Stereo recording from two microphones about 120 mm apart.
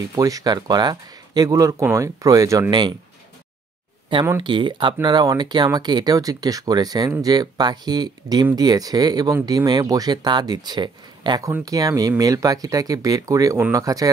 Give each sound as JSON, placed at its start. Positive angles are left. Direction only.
{"t": 0.1, "sound": "speech", "side_deg": -30}
{"t": 4.4, "sound": "speech", "side_deg": -40}